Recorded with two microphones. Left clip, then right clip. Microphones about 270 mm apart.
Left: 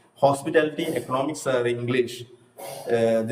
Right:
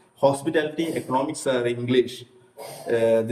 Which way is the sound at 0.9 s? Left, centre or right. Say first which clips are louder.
Right 1 dB; left.